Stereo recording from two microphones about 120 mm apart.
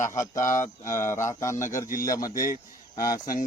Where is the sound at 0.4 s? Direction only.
90° left.